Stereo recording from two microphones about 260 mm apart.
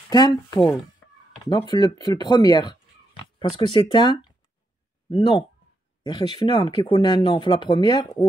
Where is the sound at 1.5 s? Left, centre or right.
Centre.